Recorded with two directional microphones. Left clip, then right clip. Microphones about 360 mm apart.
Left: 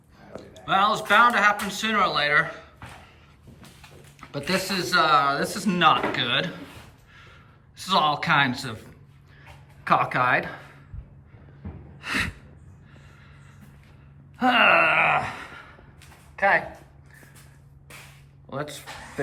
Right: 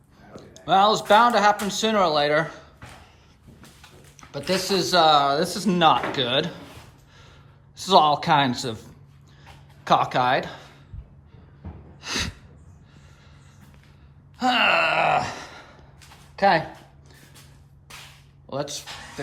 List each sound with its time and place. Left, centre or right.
0.6 s speech: centre
4.2 s speech: centre
7.8 s speech: centre
11.9 s gasp: centre
14.3 s wail: centre
16.3 s a sound: centre
18.5 s speech: centre